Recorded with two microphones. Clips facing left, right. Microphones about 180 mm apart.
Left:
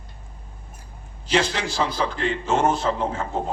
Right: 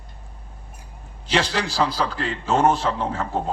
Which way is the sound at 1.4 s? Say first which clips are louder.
Right 1 dB; 35° right (ahead or behind).